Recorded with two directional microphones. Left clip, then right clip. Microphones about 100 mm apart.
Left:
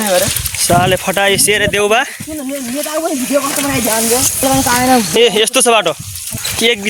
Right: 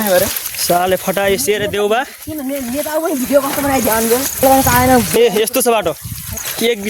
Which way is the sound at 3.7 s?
50° right (ahead or behind).